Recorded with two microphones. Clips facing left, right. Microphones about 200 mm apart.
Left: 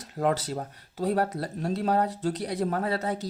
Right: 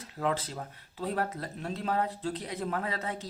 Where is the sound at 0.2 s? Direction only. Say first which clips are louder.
Left 5 dB; 40° left (ahead or behind).